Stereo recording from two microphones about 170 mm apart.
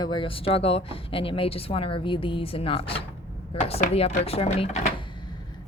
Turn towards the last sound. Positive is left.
turn(degrees=35)  # may be behind; listen again after turning